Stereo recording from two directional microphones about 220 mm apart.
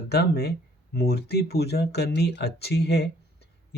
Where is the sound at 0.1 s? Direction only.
45° left (ahead or behind).